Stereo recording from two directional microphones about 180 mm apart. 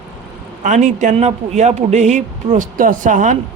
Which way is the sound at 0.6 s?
45° right (ahead or behind).